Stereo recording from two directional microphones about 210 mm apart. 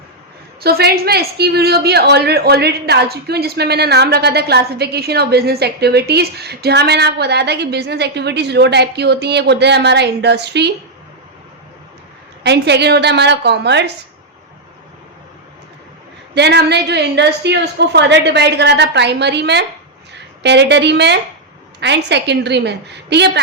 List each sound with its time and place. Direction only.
0.6 s a woman's voice: 50° right (ahead or behind)
12.4 s a woman's voice: 55° right (ahead or behind)
16.3 s a woman's voice: 55° right (ahead or behind)